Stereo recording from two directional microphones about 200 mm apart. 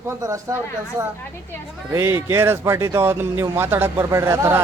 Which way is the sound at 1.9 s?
10° right (ahead or behind).